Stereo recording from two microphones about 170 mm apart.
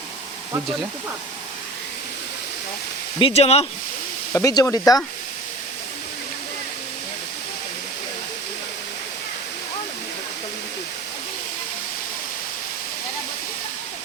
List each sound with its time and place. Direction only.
3.2 s speech: 35° left (ahead or behind)
4.3 s speech: 20° left (ahead or behind)